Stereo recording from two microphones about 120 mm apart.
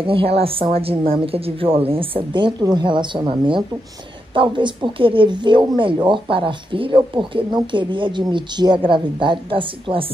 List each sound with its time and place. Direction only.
0.0 s a woman's voice: 50° right (ahead or behind)